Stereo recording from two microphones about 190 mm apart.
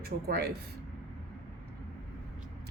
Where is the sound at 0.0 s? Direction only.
55° right (ahead or behind).